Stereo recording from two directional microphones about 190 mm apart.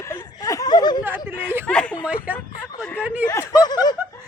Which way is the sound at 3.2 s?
20° left (ahead or behind).